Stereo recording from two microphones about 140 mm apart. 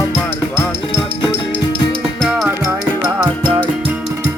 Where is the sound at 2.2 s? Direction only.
Centre (ahead or behind).